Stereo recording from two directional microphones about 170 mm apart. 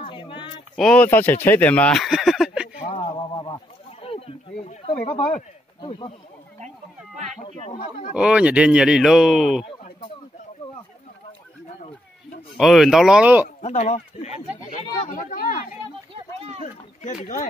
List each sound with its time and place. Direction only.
0.0 s a sound: 30° left (ahead or behind)
0.7 s speech: 5° left (ahead or behind)
2.9 s speech: 35° left (ahead or behind)
7.4 s speech: 35° left (ahead or behind)
8.1 s speech: 5° right (ahead or behind)
9.7 s a sound: 30° left (ahead or behind)
12.5 s speech: centre (ahead or behind)
13.6 s speech: 40° left (ahead or behind)
16.1 s a sound: 35° right (ahead or behind)
17.0 s speech: 50° left (ahead or behind)